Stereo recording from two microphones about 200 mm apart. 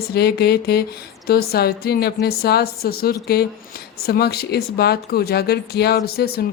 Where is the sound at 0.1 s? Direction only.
50° left (ahead or behind).